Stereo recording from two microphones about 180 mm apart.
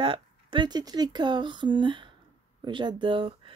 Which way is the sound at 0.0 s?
30° right (ahead or behind).